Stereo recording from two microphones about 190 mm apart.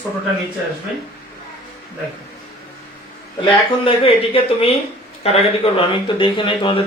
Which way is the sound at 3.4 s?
30° left (ahead or behind).